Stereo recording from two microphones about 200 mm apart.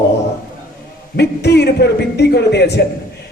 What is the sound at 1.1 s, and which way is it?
A man's voice, 55° left (ahead or behind).